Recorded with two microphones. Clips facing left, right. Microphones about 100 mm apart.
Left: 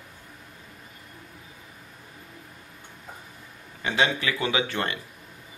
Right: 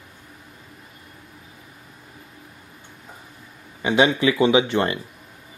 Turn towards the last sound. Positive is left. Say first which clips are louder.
# right 8 dB
turn(degrees=-25)  # may be behind; listen again after turning